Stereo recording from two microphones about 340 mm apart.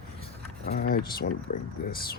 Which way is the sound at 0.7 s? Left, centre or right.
Left.